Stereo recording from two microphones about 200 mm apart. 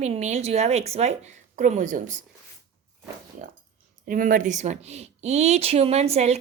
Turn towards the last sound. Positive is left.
turn(degrees=-30)  # may be behind; listen again after turning